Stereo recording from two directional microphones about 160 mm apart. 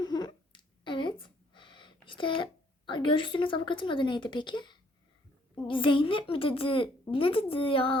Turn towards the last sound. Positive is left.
turn(degrees=35)  # may be behind; listen again after turning